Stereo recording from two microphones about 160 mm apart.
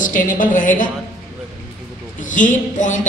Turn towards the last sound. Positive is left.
turn(degrees=50)  # may be behind; listen again after turning